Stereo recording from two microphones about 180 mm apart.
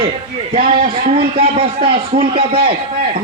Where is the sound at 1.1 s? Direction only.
30° right (ahead or behind).